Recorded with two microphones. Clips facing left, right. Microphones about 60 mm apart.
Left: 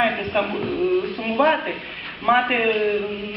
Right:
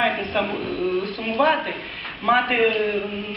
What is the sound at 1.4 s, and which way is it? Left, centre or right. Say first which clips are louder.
A woman's voice: left 1 dB; centre.